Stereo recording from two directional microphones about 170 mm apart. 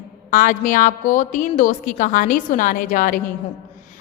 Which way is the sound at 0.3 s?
50° left (ahead or behind).